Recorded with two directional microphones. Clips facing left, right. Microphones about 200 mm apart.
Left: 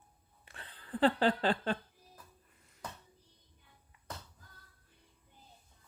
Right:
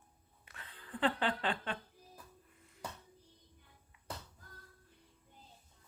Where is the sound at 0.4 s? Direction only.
30° left (ahead or behind).